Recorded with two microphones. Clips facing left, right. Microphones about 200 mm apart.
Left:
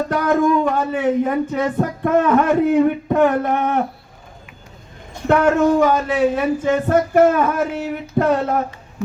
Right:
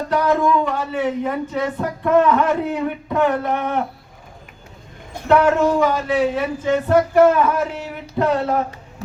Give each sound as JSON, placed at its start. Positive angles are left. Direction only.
{"t": 0.1, "sound": "speech", "side_deg": 50}
{"t": 5.4, "sound": "speech", "side_deg": 50}